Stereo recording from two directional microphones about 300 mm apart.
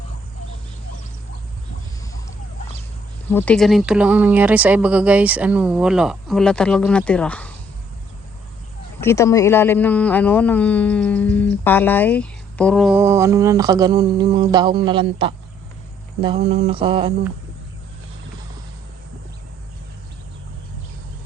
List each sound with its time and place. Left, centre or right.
3.3 s speech: centre
9.0 s speech: centre
16.2 s mantra: centre